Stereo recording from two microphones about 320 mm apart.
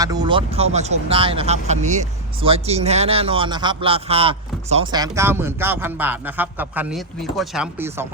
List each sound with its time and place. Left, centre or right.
0.0 s speech: centre